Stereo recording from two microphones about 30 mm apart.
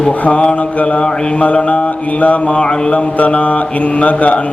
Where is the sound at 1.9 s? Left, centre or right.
Left.